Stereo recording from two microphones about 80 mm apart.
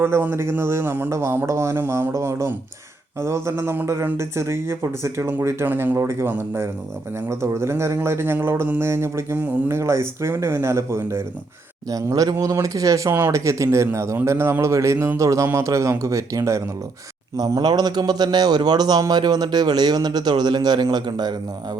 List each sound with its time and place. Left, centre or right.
0.0 s speech: right
11.9 s a man's voice: right
13.1 s speech: right
13.3 s speech: right
17.3 s a man's voice: right